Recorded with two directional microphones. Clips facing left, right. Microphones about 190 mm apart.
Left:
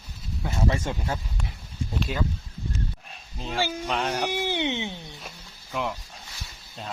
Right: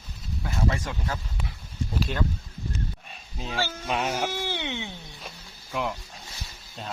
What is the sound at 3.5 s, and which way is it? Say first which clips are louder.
Speech: left 3 dB; 15° left (ahead or behind).